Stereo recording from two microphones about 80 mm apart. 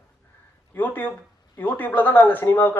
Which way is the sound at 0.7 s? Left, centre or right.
Left.